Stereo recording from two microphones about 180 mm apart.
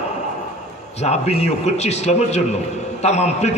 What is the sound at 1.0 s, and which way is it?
A man's voice, 35° left (ahead or behind).